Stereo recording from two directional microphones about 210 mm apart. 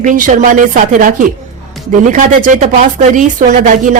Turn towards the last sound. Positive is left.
turn(degrees=-40)  # may be behind; listen again after turning